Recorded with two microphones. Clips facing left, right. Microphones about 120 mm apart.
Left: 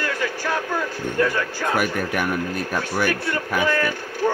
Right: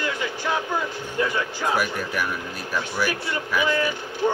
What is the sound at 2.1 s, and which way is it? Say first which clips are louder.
Speech: left 5 dB; 55° left (ahead or behind).